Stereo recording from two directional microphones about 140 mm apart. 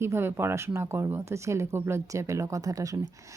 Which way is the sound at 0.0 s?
15° right (ahead or behind).